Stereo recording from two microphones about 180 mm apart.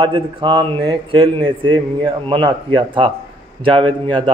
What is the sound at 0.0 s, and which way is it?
A man's voice, 30° right (ahead or behind).